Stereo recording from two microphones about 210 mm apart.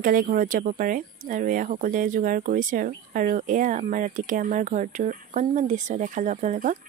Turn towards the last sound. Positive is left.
turn(degrees=-35)  # may be behind; listen again after turning